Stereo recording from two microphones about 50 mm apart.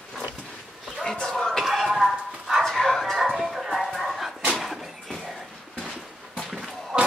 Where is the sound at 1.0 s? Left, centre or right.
Centre.